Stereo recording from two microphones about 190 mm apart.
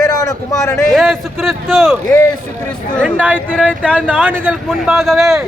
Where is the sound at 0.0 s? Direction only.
20° left (ahead or behind).